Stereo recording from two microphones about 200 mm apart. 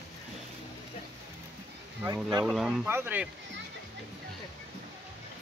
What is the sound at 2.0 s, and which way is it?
Speech, 20° right (ahead or behind).